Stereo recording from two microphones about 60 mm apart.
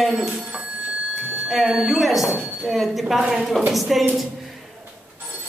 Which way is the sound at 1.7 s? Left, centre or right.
Centre.